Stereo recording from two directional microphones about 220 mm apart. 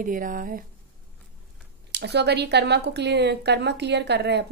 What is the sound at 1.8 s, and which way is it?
A woman's voice, 50° right (ahead or behind).